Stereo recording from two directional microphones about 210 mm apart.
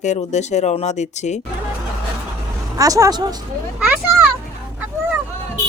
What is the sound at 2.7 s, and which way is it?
Speech, 15° right (ahead or behind).